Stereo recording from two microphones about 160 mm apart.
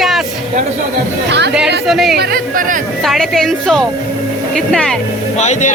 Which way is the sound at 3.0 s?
Centre (ahead or behind).